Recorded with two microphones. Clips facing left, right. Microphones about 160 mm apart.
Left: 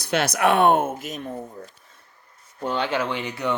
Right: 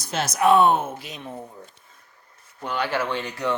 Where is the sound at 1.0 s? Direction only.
45° left (ahead or behind).